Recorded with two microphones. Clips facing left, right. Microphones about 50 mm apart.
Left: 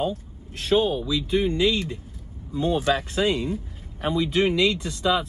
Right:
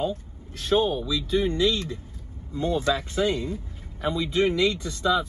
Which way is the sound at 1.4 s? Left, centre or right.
Left.